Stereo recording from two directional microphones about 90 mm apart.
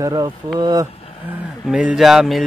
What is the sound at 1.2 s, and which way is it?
Speech, 15° right (ahead or behind).